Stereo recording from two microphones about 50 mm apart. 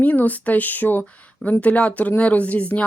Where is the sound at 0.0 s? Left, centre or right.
Left.